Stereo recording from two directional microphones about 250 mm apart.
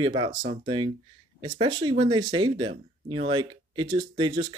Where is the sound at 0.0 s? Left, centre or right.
Centre.